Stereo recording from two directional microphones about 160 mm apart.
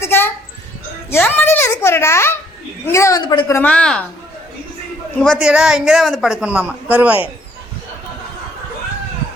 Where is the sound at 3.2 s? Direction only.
30° left (ahead or behind).